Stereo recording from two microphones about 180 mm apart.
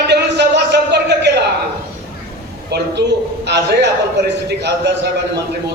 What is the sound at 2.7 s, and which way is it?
A man's voice, 70° right (ahead or behind).